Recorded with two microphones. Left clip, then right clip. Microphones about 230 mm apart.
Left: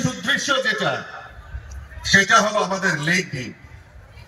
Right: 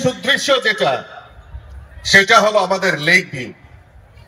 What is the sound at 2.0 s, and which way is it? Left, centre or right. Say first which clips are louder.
A man's voice: right 5 dB; right.